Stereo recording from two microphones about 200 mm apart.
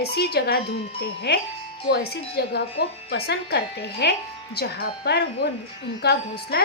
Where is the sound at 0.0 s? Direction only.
55° left (ahead or behind).